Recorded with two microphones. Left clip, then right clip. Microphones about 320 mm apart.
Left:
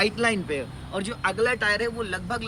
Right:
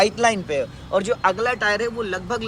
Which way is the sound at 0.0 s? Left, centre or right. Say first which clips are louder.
Right 5 dB; centre.